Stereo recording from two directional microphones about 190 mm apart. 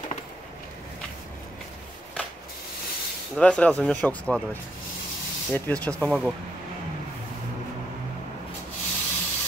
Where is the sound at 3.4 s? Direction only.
5° left (ahead or behind).